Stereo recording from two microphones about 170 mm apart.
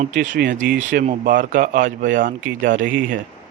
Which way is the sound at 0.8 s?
45° right (ahead or behind).